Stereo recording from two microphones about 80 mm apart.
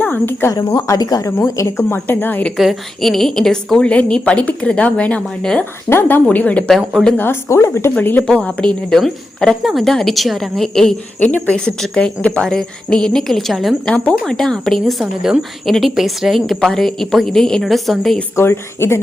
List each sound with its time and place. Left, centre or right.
0.0 s speech: left
0.9 s speech: left
2.0 s speech: left
2.6 s a woman's voice: centre
5.9 s speech: left
6.7 s a woman's voice: centre
7.2 s a woman's voice: left; by 8.7 s centre
8.9 s a woman's voice: centre
11.2 s a woman's voice: centre
13.8 s a woman's voice: centre
18.3 s speech: left